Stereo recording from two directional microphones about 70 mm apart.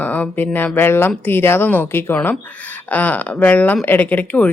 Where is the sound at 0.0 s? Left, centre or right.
Left.